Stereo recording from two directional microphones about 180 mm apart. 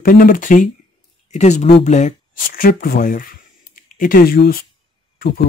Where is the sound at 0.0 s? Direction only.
55° left (ahead or behind).